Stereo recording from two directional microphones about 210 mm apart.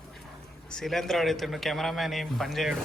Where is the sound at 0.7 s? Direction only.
Centre (ahead or behind).